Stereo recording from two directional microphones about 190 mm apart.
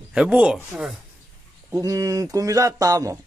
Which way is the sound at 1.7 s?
15° right (ahead or behind).